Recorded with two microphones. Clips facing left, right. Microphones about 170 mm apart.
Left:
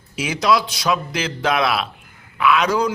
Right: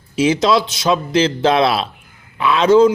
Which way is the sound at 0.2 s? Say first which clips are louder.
Right 5 dB; 25° right (ahead or behind).